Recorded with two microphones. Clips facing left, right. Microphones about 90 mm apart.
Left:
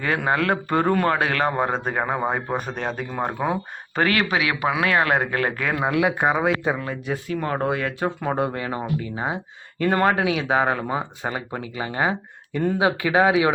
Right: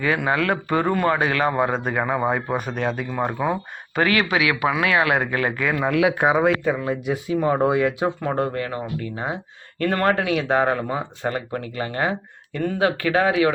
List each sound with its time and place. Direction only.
0.0 s a man's voice: 40° left (ahead or behind)
0.9 s a man's voice: 60° left (ahead or behind)
5.8 s speech: 5° left (ahead or behind)
6.8 s speech: 15° right (ahead or behind)
8.2 s speech: 5° left (ahead or behind)
8.5 s speech: 20° left (ahead or behind)